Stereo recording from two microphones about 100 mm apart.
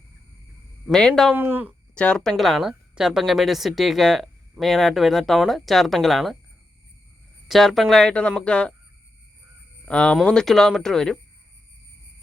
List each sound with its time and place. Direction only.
0.9 s speech: 5° left (ahead or behind)
1.4 s speech: 20° right (ahead or behind)
2.0 s speech: 10° left (ahead or behind)
7.4 s speech: centre (ahead or behind)
9.8 s speech: 10° left (ahead or behind)